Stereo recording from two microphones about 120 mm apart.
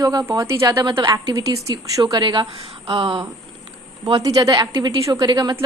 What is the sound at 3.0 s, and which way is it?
Speech, 45° right (ahead or behind).